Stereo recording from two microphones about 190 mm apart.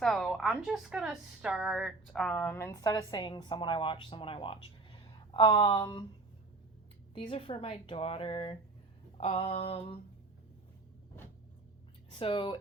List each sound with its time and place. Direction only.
0.0 s a woman's voice: centre (ahead or behind); by 6.1 s 25° left (ahead or behind)
7.1 s a woman's voice: 30° left (ahead or behind)
9.1 s a sound: 30° left (ahead or behind)
12.1 s a woman's voice: 25° left (ahead or behind)